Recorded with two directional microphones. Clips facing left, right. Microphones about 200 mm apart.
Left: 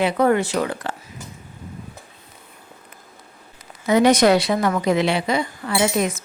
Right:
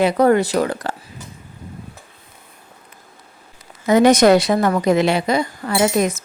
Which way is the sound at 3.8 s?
45° right (ahead or behind).